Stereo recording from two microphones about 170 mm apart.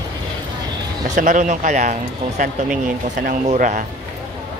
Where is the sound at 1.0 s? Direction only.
45° right (ahead or behind).